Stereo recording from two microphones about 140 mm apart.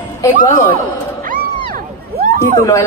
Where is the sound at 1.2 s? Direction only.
85° right.